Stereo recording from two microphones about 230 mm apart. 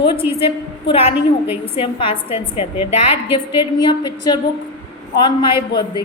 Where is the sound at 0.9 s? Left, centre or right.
Left.